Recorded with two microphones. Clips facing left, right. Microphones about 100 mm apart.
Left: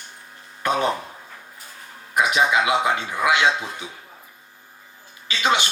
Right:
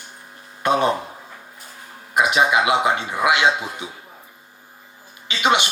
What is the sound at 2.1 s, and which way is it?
Speech, 20° right (ahead or behind).